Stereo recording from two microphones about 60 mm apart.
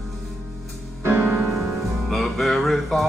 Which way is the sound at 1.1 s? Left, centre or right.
Right.